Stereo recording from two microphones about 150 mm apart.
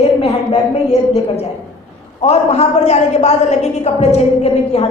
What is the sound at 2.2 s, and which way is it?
A woman's voice, 40° left (ahead or behind).